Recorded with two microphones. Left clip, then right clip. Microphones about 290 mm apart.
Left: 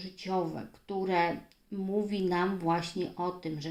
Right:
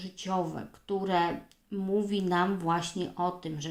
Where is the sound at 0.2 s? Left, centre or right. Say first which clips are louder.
Right 1 dB; right.